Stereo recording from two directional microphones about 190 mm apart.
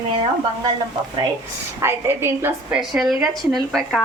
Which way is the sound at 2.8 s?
Centre (ahead or behind).